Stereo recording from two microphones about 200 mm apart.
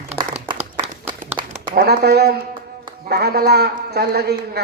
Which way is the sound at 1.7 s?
50° right (ahead or behind).